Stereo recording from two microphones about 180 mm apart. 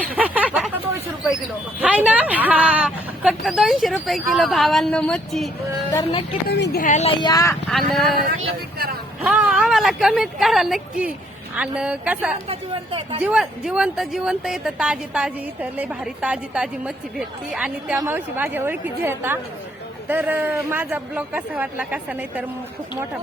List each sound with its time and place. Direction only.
0.0 s a sound: 10° right (ahead or behind)
1.8 s a woman's voice: 10° right (ahead or behind)
5.9 s speech: 20° left (ahead or behind)
6.5 s speech: 65° left (ahead or behind)
6.8 s speech: 40° left (ahead or behind); by 7.5 s 20° left (ahead or behind)
7.7 s a woman's voice: centre (ahead or behind)
9.2 s a woman's voice: 5° right (ahead or behind)
12.5 s speech: 30° right (ahead or behind)
13.2 s a woman's voice: 5° right (ahead or behind)